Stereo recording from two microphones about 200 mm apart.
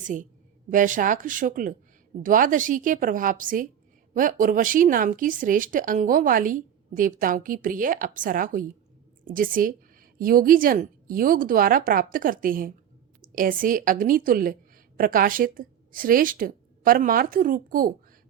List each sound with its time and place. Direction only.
0.0 s a woman's voice: 40° right (ahead or behind)